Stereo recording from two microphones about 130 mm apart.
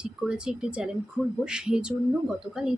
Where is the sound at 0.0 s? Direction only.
5° right (ahead or behind).